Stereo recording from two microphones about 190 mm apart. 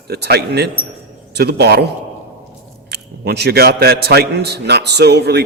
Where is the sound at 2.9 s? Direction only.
60° right (ahead or behind).